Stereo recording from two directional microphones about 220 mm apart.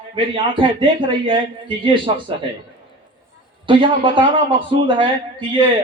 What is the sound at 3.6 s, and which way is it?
A man's voice, 20° right (ahead or behind).